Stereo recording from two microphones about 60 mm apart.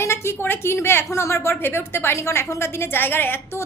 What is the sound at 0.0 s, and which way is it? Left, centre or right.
A woman's voice, left.